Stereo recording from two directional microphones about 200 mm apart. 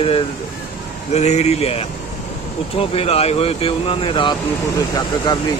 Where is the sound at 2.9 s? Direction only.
30° left (ahead or behind).